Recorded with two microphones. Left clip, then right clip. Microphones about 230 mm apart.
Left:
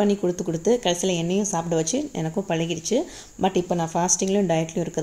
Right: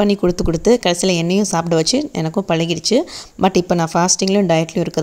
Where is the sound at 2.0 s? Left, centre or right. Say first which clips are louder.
Right 7 dB; right.